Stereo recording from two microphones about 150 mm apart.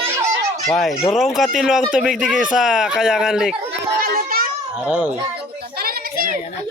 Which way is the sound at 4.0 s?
80° right.